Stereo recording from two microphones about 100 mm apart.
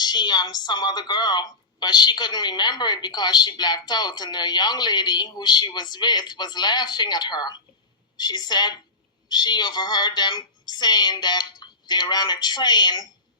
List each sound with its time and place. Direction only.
0.0 s a woman's voice: 45° left (ahead or behind)